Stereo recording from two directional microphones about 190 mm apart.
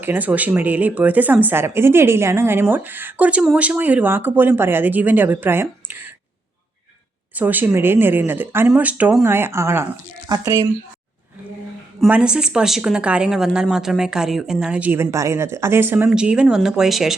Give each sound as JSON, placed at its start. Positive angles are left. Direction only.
{"t": 0.0, "sound": "speech", "side_deg": -10}
{"t": 7.3, "sound": "speech", "side_deg": -10}
{"t": 11.9, "sound": "speech", "side_deg": -5}